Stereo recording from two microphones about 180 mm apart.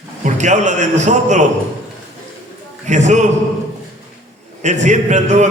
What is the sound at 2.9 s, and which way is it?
Speech, 40° right (ahead or behind).